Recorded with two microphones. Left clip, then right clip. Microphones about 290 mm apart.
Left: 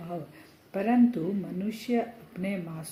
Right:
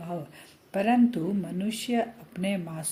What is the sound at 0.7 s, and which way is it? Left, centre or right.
Speech, right.